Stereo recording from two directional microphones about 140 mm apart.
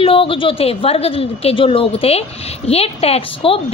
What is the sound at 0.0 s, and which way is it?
A woman's voice, 40° left (ahead or behind).